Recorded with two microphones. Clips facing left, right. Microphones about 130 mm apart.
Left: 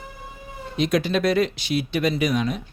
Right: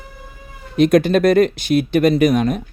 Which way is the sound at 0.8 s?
50° right (ahead or behind).